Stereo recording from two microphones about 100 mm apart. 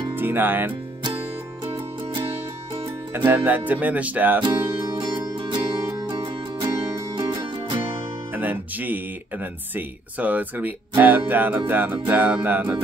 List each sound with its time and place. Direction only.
0.1 s speech: 20° right (ahead or behind)
3.1 s speech: 15° right (ahead or behind)
4.4 s music: 50° right (ahead or behind)
8.3 s speech: 20° right (ahead or behind)
12.1 s music: 15° right (ahead or behind)